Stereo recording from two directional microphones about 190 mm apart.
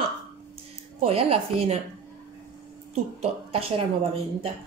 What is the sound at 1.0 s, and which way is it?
Speech, 30° right (ahead or behind).